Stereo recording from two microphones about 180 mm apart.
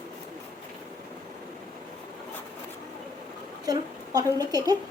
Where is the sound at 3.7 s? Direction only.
20° right (ahead or behind).